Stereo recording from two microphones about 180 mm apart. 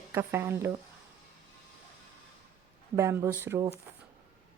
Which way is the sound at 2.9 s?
15° right (ahead or behind).